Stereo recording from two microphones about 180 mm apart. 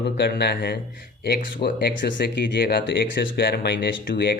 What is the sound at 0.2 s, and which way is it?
Speech, 65° left (ahead or behind).